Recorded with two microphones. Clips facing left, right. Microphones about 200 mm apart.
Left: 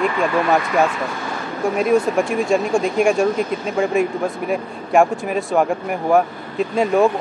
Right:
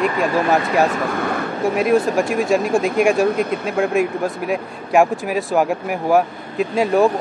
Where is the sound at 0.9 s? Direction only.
55° right (ahead or behind).